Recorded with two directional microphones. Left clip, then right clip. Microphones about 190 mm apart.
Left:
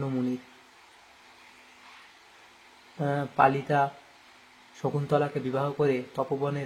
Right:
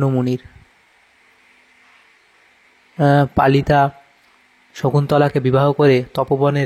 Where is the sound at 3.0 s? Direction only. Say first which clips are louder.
Right 9 dB; 50° right (ahead or behind).